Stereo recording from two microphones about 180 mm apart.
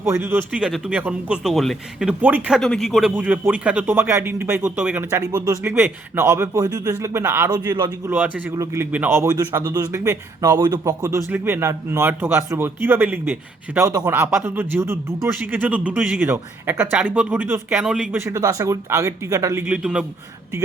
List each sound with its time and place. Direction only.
0.0 s speech: 15° right (ahead or behind)
8.1 s speech: 10° right (ahead or behind)